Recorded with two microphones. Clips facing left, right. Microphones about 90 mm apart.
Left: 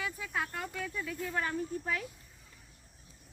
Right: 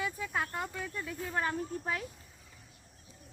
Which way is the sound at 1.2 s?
30° right (ahead or behind).